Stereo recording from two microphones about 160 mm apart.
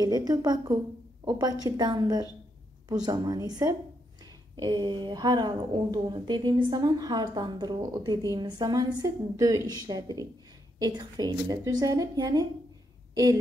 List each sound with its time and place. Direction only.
0.0 s a woman's voice: 25° right (ahead or behind)